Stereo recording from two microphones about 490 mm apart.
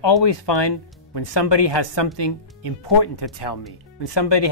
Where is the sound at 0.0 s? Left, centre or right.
Left.